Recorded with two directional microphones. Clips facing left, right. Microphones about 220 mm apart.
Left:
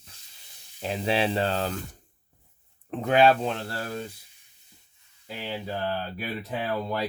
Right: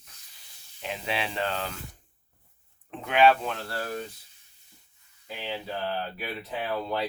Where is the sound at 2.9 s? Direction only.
40° left (ahead or behind).